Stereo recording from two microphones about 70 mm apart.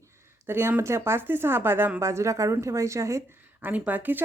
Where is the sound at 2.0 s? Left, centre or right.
Right.